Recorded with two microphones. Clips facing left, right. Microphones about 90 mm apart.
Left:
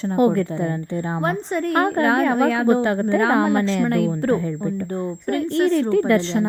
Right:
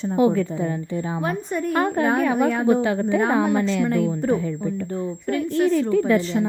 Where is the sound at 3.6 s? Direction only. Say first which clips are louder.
Left 1 dB; 40° left (ahead or behind).